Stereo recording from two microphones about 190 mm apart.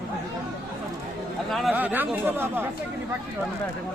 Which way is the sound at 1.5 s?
5° right (ahead or behind).